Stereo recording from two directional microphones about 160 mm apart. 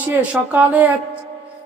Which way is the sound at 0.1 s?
10° right (ahead or behind).